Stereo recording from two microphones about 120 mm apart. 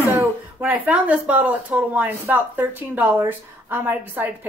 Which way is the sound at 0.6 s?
15° right (ahead or behind).